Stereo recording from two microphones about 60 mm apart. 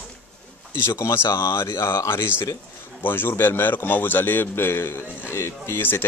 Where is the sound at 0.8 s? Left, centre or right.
Left.